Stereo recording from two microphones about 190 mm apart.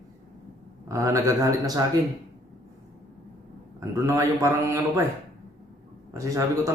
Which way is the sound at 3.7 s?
15° right (ahead or behind).